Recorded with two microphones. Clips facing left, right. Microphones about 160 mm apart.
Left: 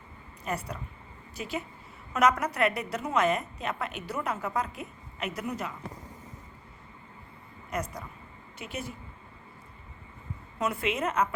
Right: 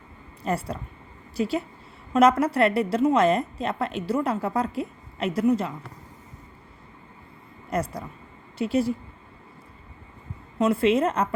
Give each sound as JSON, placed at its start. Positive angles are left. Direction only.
{"t": 0.4, "sound": "a woman's voice", "side_deg": -30}
{"t": 7.7, "sound": "a woman's voice", "side_deg": -30}
{"t": 10.6, "sound": "a woman's voice", "side_deg": -30}